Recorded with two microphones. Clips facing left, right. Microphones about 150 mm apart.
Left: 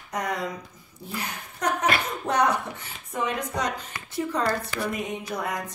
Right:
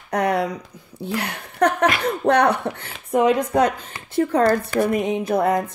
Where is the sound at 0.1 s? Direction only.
65° right (ahead or behind).